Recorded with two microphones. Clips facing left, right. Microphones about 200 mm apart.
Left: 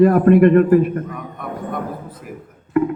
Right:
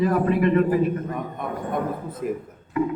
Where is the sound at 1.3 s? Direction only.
20° right (ahead or behind).